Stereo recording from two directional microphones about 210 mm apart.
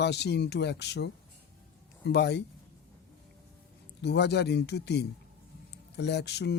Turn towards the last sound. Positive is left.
turn(degrees=55)  # may be behind; listen again after turning